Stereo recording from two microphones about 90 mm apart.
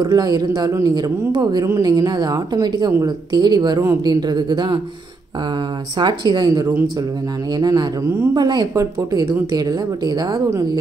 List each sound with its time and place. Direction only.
0.0 s a woman's voice: 45° right (ahead or behind)
0.7 s a man's voice: 35° right (ahead or behind)
0.9 s a woman's voice: 50° right (ahead or behind)
5.9 s a woman's voice: 55° right (ahead or behind)